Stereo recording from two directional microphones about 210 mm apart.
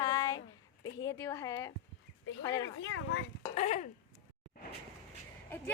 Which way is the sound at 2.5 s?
65° left (ahead or behind).